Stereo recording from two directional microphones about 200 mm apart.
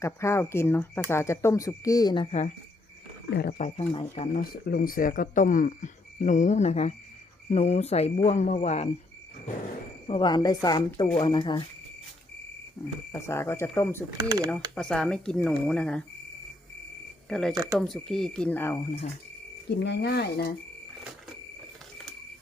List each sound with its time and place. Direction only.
0.0 s speech: 15° left (ahead or behind); by 2.5 s 30° left (ahead or behind)
3.2 s speech: 55° left (ahead or behind)
3.6 s speech: 30° left (ahead or behind)
4.4 s speech: 50° left (ahead or behind); by 8.9 s 35° left (ahead or behind)
10.1 s speech: 25° left (ahead or behind)
13.1 s speech: 15° left (ahead or behind)
14.2 s speech: 20° right (ahead or behind)
14.8 s speech: 5° left (ahead or behind)
17.2 s speech: centre (ahead or behind)
17.5 s speech: 15° right (ahead or behind)
17.7 s speech: centre (ahead or behind)
19.8 s speech: 55° left (ahead or behind)